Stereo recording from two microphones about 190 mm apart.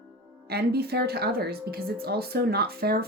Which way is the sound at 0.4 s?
55° right (ahead or behind).